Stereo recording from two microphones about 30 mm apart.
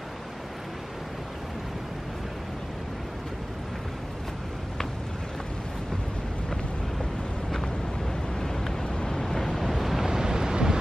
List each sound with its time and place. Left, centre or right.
8.8 s vehicle: left
9.6 s waves: centre
10.0 s waves: right